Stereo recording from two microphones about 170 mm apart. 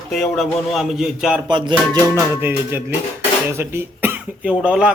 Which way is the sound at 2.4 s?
15° right (ahead or behind).